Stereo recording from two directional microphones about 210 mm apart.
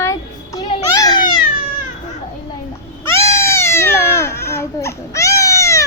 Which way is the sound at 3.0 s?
15° left (ahead or behind).